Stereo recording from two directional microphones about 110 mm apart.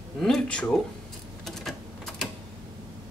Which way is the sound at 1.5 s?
5° left (ahead or behind).